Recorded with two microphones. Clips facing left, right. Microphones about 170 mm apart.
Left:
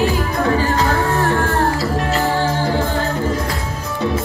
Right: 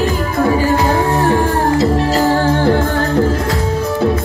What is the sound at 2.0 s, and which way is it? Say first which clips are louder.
Music: right 5 dB; 35° right (ahead or behind).